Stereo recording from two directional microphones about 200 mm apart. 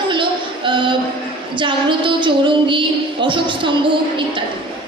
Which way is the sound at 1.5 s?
25° right (ahead or behind).